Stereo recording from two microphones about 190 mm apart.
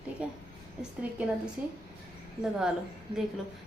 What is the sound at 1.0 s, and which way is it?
Speech, 5° right (ahead or behind).